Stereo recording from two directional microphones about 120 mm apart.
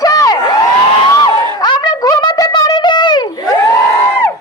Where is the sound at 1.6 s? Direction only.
35° left (ahead or behind).